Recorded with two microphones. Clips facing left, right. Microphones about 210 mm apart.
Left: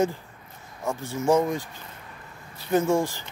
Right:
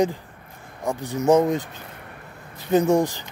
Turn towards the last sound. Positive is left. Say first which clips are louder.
# right 4 dB
turn(degrees=-20)  # may be behind; listen again after turning